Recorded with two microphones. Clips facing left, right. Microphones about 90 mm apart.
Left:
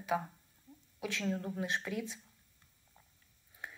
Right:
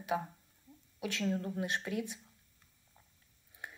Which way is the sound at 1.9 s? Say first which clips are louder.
Right 2 dB; 55° right (ahead or behind).